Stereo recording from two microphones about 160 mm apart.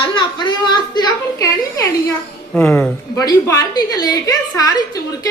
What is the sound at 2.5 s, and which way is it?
A woman's voice, 10° left (ahead or behind).